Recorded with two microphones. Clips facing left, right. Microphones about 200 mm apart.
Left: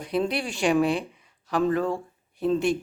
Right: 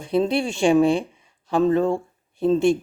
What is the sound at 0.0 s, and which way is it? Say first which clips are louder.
Speech: right 5 dB; 25° right (ahead or behind).